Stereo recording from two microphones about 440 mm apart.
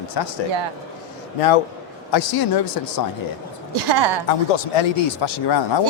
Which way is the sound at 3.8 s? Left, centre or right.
Right.